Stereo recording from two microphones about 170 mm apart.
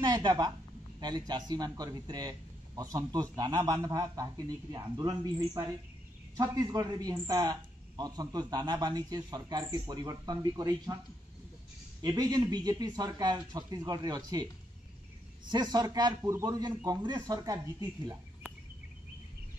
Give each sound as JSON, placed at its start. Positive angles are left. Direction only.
{"t": 0.0, "sound": "a woman's voice", "side_deg": -25}
{"t": 12.0, "sound": "a man's voice", "side_deg": -25}
{"t": 15.5, "sound": "a man's voice", "side_deg": -25}